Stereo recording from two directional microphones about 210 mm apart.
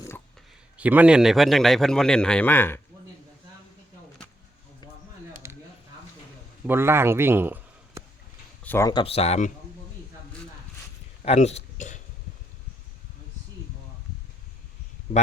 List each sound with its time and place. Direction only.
0.8 s a man's voice: 5° right (ahead or behind); by 2.8 s 10° left (ahead or behind)
5.4 s a sound: 10° right (ahead or behind)
6.7 s a man's voice: 10° right (ahead or behind)
8.6 s speech: 10° left (ahead or behind)
8.9 s speech: 25° left (ahead or behind)
11.2 s speech: 30° left (ahead or behind)